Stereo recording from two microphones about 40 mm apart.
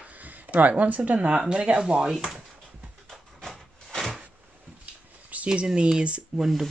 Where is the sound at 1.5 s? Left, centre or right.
Right.